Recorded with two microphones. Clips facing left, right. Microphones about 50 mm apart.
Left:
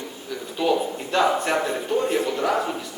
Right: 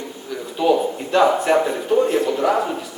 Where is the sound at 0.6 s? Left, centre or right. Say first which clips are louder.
Right 5 dB; centre.